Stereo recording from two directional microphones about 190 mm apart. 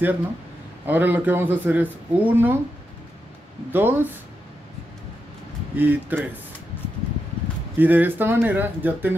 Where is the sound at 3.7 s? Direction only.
10° right (ahead or behind).